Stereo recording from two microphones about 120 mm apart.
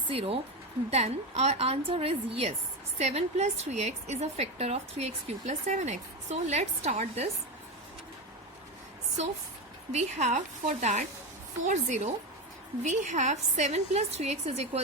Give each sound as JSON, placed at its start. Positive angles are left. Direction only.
{"t": 0.1, "sound": "speech", "side_deg": -50}
{"t": 0.9, "sound": "a woman's voice", "side_deg": -65}
{"t": 3.0, "sound": "a woman's voice", "side_deg": -65}
{"t": 9.9, "sound": "a woman's voice", "side_deg": -70}
{"t": 11.6, "sound": "a woman's voice", "side_deg": -90}